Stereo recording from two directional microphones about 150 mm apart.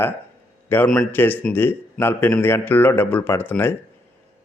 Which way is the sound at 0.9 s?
10° left (ahead or behind).